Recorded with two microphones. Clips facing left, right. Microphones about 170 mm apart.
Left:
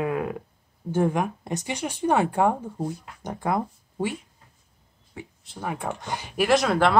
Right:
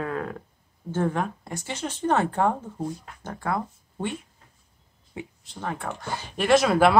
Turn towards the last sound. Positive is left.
turn(degrees=-5)  # may be behind; listen again after turning